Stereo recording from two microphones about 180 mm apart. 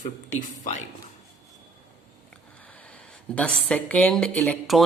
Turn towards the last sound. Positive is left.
turn(degrees=0)  # may be behind; listen again after turning